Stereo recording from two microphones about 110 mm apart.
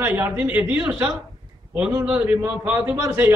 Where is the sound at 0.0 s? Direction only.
15° right (ahead or behind).